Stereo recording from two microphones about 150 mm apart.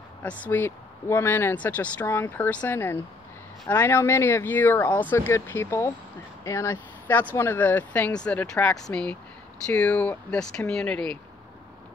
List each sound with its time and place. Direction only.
0.2 s speech: 10° left (ahead or behind)